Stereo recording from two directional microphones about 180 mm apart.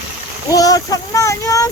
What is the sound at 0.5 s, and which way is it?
Speech, 20° left (ahead or behind).